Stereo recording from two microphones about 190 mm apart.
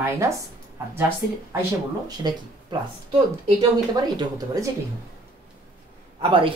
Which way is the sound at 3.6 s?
20° right (ahead or behind).